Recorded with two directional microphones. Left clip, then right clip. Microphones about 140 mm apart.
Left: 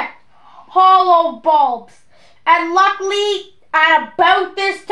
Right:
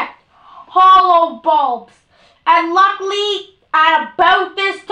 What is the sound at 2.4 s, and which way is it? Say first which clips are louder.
A child's voice: right 1 dB; 30° left (ahead or behind).